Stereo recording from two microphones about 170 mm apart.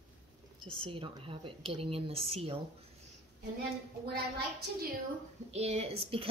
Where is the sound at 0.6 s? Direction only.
30° right (ahead or behind).